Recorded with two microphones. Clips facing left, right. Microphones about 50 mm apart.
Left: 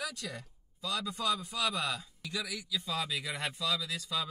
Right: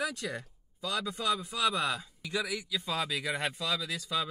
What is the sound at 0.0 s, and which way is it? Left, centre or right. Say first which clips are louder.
Speech: right 5 dB; right.